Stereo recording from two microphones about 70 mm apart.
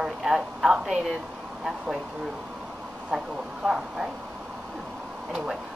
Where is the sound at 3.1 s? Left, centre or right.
Centre.